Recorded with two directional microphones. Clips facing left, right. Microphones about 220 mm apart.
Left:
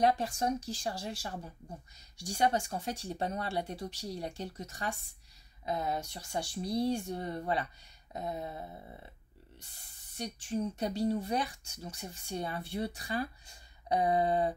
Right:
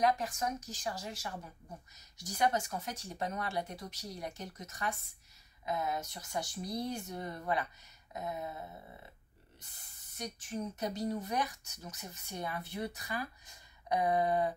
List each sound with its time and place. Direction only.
0.0 s speech: 30° left (ahead or behind)
10.1 s speech: 30° left (ahead or behind)